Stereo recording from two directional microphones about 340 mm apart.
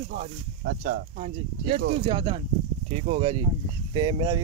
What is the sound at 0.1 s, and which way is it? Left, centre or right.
Speech, right.